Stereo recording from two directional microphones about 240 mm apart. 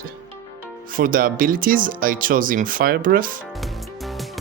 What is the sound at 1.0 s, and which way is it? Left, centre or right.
Speech, right.